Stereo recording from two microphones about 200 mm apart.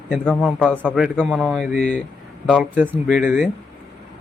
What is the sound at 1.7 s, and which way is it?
Speech, 40° left (ahead or behind).